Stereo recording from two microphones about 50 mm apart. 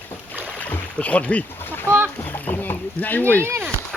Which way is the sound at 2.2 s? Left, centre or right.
Left.